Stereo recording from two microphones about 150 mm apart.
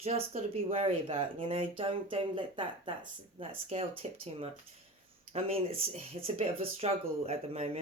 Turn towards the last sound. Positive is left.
turn(degrees=-45)  # may be behind; listen again after turning